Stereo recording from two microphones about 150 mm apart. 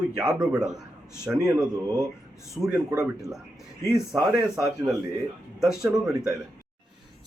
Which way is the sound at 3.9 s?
5° right (ahead or behind).